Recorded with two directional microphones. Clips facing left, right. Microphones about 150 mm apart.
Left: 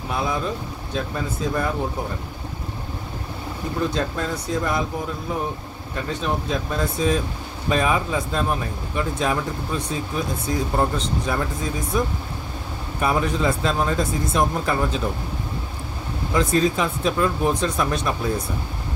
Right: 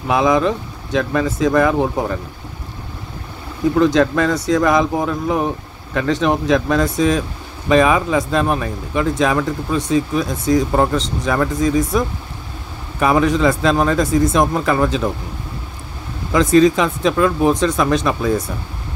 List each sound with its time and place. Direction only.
0.1 s speech: 90° right
3.7 s speech: 90° right
13.0 s speech: 90° right
16.3 s speech: 90° right